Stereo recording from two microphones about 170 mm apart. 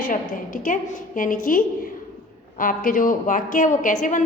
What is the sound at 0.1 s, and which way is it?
A woman's voice, 50° left (ahead or behind).